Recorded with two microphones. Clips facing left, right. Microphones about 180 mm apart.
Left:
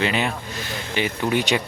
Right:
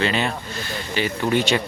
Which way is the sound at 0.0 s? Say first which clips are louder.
Right 1 dB; 15° left (ahead or behind).